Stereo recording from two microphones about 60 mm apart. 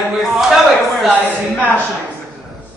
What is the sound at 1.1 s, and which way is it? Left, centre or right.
Speech, right.